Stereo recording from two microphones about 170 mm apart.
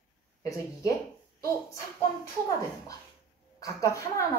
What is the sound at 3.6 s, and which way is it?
Speech, 20° left (ahead or behind).